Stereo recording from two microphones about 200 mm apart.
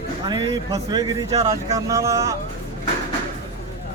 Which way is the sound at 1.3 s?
30° right (ahead or behind).